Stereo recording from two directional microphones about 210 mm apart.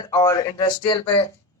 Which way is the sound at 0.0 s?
15° left (ahead or behind).